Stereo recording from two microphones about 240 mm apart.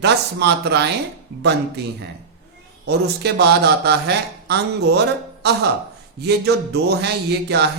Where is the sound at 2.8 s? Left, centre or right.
Right.